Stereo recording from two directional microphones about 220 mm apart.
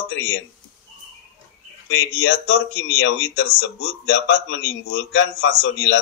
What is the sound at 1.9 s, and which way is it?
Speech, 55° left (ahead or behind).